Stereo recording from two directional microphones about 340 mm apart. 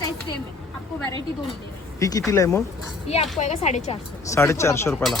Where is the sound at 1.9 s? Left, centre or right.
Centre.